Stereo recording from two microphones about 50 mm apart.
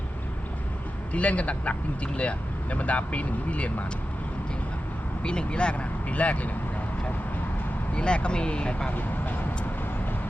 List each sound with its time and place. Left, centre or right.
1.1 s speech: left
5.2 s speech: centre
7.9 s speech: left
8.9 s speech: left